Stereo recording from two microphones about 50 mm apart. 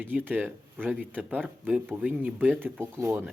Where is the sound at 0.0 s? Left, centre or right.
Right.